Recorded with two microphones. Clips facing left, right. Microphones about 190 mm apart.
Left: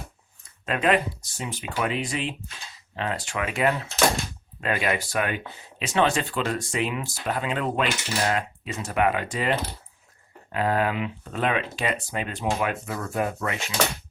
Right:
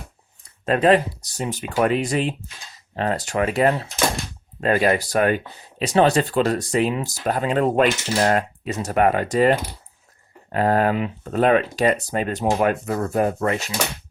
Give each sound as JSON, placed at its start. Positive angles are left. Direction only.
{"t": 0.6, "sound": "speech", "side_deg": -35}